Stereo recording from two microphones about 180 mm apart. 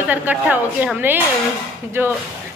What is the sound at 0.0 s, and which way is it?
A woman's voice, 10° right (ahead or behind).